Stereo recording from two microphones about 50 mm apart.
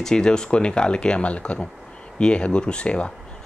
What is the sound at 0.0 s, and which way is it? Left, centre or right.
Speech, centre.